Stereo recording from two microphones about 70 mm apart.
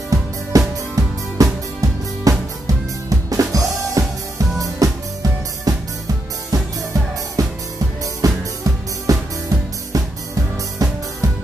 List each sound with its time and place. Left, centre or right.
0.1 s music: right